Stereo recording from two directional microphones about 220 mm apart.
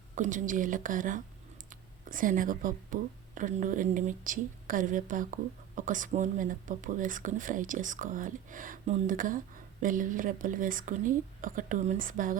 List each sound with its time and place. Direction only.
0.2 s speech: 35° right (ahead or behind)